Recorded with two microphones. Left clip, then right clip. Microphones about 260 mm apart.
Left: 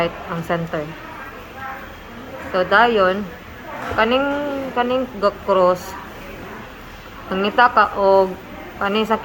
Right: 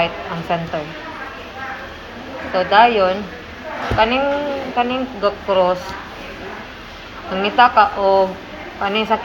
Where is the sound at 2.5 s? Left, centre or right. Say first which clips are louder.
Right 2 dB; left.